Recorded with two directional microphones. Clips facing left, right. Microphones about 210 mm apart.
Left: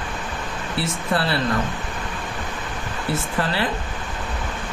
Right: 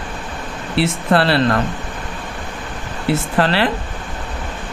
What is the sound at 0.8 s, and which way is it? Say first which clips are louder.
Speech: right 8 dB; 75° right (ahead or behind).